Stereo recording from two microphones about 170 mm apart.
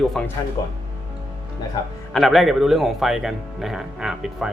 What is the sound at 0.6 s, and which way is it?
Speech, 20° left (ahead or behind).